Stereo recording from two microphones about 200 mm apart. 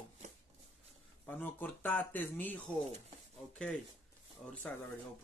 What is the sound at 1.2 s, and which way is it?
Speech, 10° left (ahead or behind).